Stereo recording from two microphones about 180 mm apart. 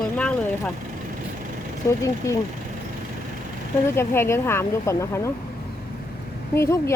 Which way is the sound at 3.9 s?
15° left (ahead or behind).